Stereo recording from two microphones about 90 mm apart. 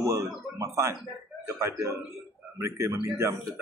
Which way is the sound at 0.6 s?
35° right (ahead or behind).